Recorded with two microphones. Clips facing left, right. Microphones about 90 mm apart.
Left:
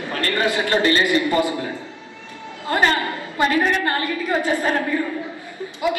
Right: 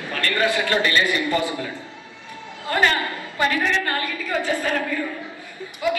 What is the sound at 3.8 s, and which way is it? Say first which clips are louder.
Speech: left 4 dB; 30° left (ahead or behind).